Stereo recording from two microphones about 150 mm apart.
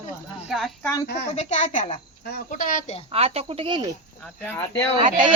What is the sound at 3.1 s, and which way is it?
Speech, 40° right (ahead or behind).